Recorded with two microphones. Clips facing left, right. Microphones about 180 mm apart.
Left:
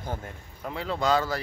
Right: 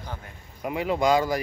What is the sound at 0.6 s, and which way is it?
Speech, 15° right (ahead or behind).